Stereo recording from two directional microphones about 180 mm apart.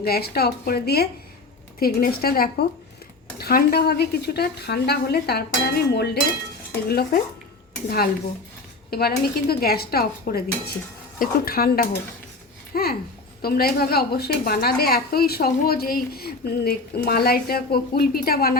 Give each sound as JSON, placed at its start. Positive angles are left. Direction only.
{"t": 0.0, "sound": "a woman's voice", "side_deg": 60}
{"t": 12.7, "sound": "babbling", "side_deg": 55}
{"t": 13.4, "sound": "a woman's voice", "side_deg": 60}